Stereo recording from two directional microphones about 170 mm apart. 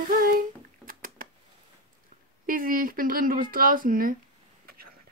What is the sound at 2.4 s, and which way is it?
Speech, 55° right (ahead or behind).